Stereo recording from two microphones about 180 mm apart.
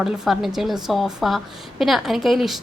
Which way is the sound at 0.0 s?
Centre (ahead or behind).